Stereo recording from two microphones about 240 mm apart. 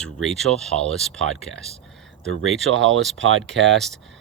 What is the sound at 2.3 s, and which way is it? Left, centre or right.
Speech, right.